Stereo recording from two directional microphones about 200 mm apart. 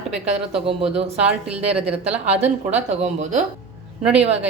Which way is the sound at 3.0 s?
35° right (ahead or behind).